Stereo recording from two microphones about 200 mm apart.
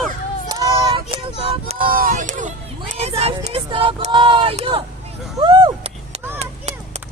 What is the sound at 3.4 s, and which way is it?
Speech, 30° right (ahead or behind).